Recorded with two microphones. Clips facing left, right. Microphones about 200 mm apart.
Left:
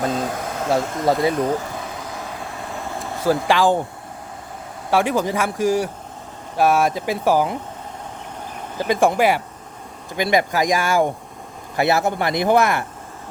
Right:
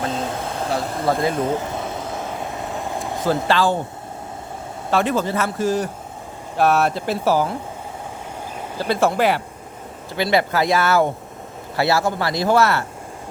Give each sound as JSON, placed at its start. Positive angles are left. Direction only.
{"t": 0.1, "sound": "speech", "side_deg": -25}
{"t": 3.2, "sound": "speech", "side_deg": 15}
{"t": 4.9, "sound": "speech", "side_deg": 10}
{"t": 8.8, "sound": "a man's voice", "side_deg": 15}